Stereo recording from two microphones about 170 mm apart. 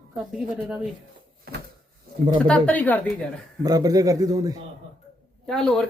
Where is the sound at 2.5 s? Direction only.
10° left (ahead or behind).